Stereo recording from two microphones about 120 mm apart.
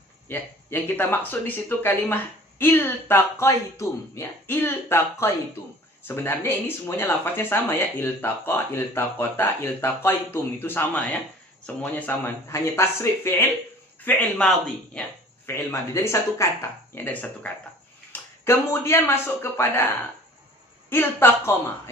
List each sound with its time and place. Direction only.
0.3 s speech: 15° left (ahead or behind)
15.4 s a man's voice: 20° left (ahead or behind)
20.9 s speech: 20° left (ahead or behind)